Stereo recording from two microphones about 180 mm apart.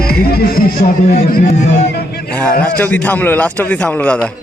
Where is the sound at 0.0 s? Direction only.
60° left (ahead or behind).